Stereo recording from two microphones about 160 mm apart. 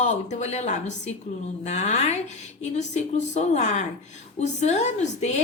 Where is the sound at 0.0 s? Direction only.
45° left (ahead or behind).